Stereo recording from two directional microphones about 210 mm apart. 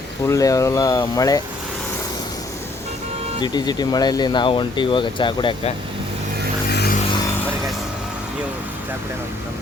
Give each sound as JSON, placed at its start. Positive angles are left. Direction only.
{"t": 0.3, "sound": "speech", "side_deg": 15}
{"t": 3.4, "sound": "speech", "side_deg": 20}
{"t": 6.7, "sound": "a sound", "side_deg": 50}